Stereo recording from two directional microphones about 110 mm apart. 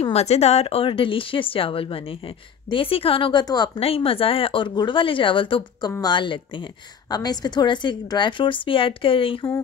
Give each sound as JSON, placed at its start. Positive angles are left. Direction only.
{"t": 0.0, "sound": "speech", "side_deg": 70}
{"t": 3.4, "sound": "a woman's voice", "side_deg": 40}
{"t": 3.8, "sound": "speech", "side_deg": 60}